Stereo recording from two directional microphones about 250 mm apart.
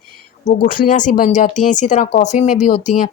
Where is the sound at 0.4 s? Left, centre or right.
Left.